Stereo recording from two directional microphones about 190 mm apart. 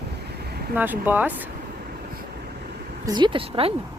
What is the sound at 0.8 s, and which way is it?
Speech, 10° right (ahead or behind).